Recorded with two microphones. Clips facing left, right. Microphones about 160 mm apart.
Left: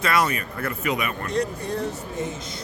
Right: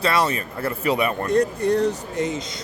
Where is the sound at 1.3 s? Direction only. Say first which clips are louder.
Right 8 dB; 65° right (ahead or behind); by 2.3 s 80° right.